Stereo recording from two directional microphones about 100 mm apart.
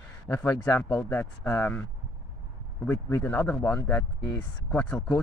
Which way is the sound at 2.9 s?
30° left (ahead or behind).